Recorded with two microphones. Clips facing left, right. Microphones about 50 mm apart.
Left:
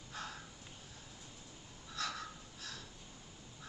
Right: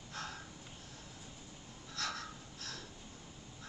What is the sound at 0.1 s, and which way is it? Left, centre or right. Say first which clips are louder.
Crow: right 1 dB; centre.